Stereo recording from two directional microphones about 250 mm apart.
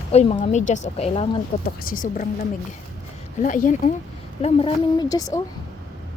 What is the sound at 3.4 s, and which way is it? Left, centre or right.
Speech, left.